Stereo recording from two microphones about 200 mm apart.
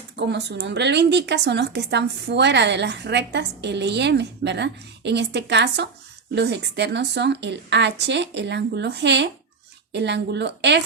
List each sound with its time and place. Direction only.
0.2 s a woman's voice: 60° right (ahead or behind)